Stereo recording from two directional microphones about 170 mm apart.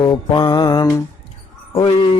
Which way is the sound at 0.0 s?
25° left (ahead or behind).